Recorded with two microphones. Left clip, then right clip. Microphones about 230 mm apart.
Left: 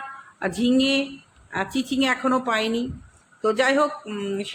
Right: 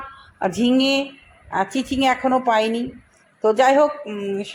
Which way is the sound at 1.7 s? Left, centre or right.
Left.